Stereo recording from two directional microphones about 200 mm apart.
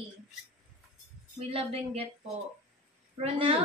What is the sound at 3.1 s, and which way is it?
Speech, 30° right (ahead or behind).